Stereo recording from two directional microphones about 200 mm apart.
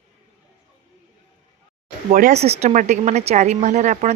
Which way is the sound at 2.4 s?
35° right (ahead or behind).